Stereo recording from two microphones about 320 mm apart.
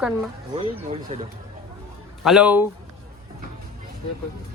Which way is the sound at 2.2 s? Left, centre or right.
Centre.